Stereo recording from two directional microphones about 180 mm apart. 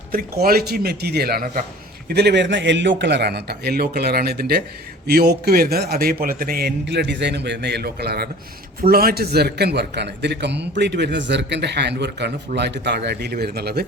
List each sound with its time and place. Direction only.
0.1 s a man's voice: 55° right (ahead or behind)
2.0 s a man's voice: 65° right (ahead or behind)